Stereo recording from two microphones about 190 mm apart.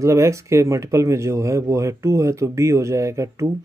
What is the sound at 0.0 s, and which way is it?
Speech, 15° right (ahead or behind).